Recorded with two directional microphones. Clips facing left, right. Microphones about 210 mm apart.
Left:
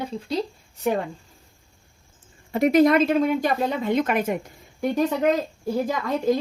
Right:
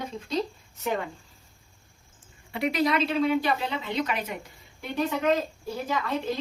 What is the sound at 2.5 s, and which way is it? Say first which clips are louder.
A woman's voice: left 9 dB; 45° left (ahead or behind).